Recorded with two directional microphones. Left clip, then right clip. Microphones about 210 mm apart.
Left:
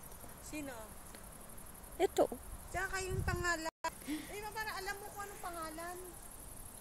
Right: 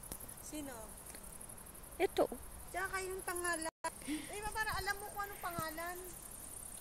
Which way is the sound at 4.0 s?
Centre (ahead or behind).